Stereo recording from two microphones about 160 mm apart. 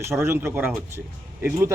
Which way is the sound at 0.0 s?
15° right (ahead or behind).